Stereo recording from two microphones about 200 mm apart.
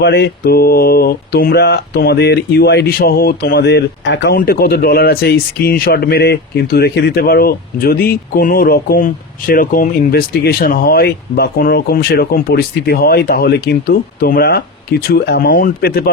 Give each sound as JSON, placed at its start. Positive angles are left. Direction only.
{"t": 0.0, "sound": "speech", "side_deg": 55}
{"t": 4.4, "sound": "speech", "side_deg": 50}